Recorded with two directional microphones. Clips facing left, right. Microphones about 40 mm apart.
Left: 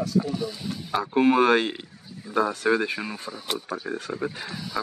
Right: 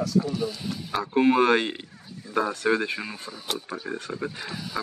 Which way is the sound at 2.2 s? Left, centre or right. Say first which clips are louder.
Left 1 dB; centre.